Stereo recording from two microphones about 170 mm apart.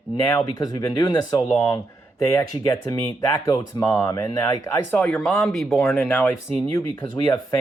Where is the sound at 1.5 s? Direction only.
15° left (ahead or behind).